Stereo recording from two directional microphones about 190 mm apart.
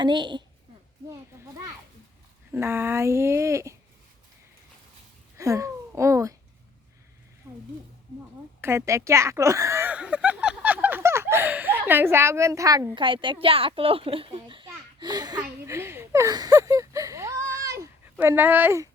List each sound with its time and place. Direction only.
0.0 s a woman's voice: 25° right (ahead or behind)
2.5 s speech: 10° right (ahead or behind)
5.4 s speech: 15° right (ahead or behind)
7.4 s a sound: 15° right (ahead or behind)
8.6 s speech: 15° right (ahead or behind)